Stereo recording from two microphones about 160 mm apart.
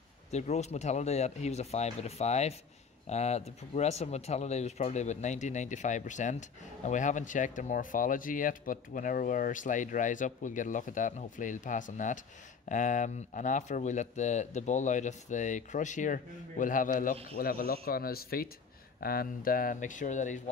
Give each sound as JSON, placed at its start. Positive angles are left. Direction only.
{"t": 0.3, "sound": "speech", "side_deg": 45}